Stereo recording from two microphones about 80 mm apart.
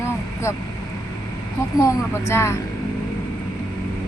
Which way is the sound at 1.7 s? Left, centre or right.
Left.